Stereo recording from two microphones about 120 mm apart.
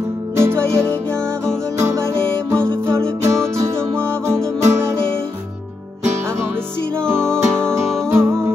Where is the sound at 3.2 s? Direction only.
25° right (ahead or behind).